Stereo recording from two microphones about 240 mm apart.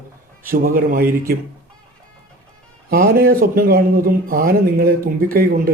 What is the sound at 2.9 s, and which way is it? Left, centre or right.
Speech, right.